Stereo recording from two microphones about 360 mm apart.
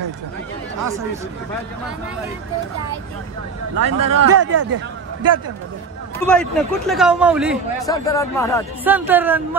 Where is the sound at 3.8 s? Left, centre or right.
Right.